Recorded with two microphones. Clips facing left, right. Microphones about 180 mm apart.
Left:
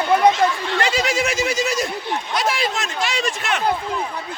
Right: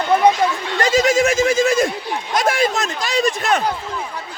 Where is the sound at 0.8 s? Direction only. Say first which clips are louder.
Right 7 dB; 45° right (ahead or behind).